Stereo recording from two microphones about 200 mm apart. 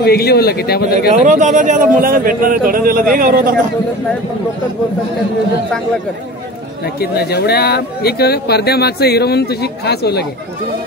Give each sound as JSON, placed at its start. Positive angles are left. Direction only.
{"t": 0.0, "sound": "speech", "side_deg": 50}
{"t": 1.2, "sound": "speech", "side_deg": -40}
{"t": 7.0, "sound": "speech", "side_deg": 50}